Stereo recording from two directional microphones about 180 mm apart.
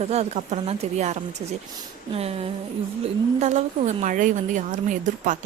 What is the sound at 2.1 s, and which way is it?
Speech, 35° right (ahead or behind).